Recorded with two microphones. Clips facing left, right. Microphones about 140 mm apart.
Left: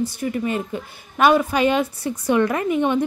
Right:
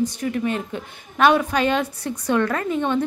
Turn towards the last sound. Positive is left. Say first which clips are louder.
# left 2 dB
turn(degrees=15)  # may be behind; listen again after turning